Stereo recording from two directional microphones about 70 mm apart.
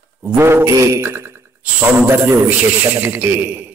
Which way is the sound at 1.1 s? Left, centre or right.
Right.